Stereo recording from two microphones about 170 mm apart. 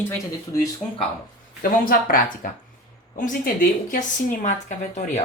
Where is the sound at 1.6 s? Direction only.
60° left (ahead or behind).